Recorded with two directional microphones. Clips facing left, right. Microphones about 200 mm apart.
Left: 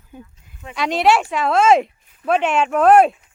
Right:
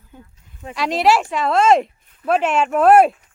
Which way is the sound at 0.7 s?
Centre (ahead or behind).